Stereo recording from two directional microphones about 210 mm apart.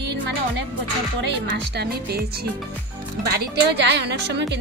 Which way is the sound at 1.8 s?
50° right (ahead or behind).